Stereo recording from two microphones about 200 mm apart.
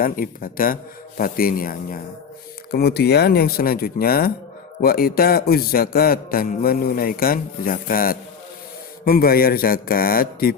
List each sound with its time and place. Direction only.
0.0 s a man's voice: 45° left (ahead or behind)